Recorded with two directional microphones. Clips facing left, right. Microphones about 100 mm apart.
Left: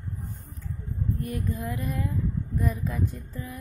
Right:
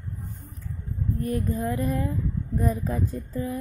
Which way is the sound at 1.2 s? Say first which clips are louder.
Right 9 dB; 35° right (ahead or behind).